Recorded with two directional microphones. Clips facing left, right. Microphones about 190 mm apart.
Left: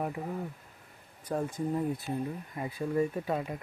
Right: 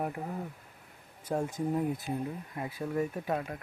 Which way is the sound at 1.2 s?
10° right (ahead or behind).